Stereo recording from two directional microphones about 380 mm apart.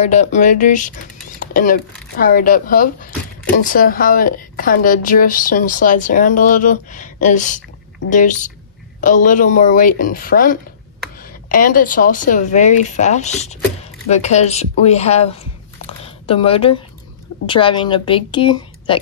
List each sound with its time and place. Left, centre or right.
0.0 s a woman's voice: centre
16.0 s a sound: centre
17.5 s speech: centre